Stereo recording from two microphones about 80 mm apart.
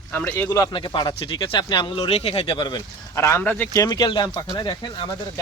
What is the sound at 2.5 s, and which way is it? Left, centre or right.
Speech, left.